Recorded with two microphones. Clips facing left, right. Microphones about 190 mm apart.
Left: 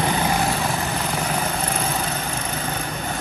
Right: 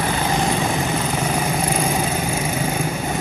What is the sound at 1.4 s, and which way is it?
Vehicle, 10° right (ahead or behind).